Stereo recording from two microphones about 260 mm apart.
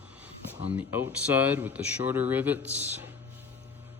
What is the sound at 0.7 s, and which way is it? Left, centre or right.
Speech, centre.